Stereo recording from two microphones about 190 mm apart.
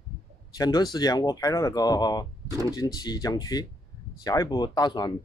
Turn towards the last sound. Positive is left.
turn(degrees=20)  # may be behind; listen again after turning